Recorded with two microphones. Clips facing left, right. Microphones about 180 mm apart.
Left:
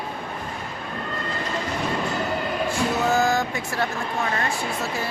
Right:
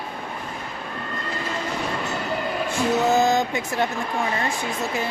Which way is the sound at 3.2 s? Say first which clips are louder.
Right 2 dB; 20° right (ahead or behind).